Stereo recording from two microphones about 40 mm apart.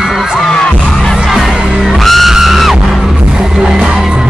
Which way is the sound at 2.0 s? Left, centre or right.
Centre.